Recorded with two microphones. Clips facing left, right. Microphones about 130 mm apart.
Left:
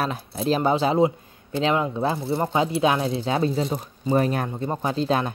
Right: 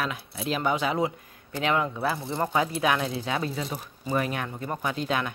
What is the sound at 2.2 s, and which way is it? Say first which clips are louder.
Speech: left 4 dB; 10° left (ahead or behind).